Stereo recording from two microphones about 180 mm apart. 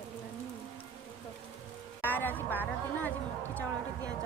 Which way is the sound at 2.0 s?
10° left (ahead or behind).